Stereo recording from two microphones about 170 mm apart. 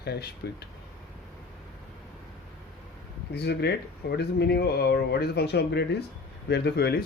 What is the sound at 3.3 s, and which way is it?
Speech, 75° left (ahead or behind).